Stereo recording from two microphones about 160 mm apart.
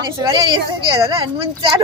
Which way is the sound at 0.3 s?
30° right (ahead or behind).